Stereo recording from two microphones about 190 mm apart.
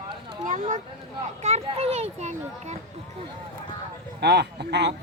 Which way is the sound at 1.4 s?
35° right (ahead or behind).